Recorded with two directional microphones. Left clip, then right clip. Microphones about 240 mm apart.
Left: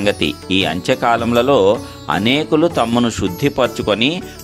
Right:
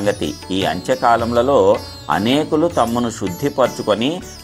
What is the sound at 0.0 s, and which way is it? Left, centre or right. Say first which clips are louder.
Speech: left 2 dB; left.